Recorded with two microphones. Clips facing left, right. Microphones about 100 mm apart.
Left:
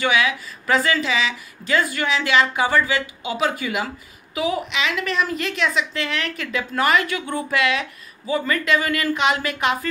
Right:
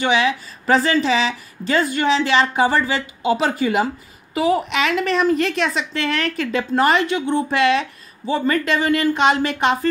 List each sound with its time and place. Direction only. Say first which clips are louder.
0.0 s speech: right 2 dB; 30° right (ahead or behind)